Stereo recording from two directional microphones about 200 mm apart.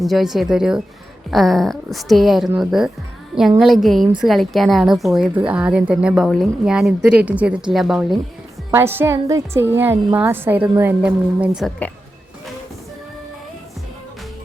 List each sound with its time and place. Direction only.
0.0 s speech: centre (ahead or behind)
8.7 s a woman's voice: 10° right (ahead or behind)